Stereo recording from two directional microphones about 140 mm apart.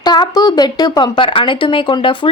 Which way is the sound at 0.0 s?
30° left (ahead or behind).